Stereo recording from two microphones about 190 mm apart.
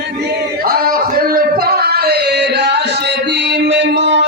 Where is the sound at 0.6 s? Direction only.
50° right (ahead or behind).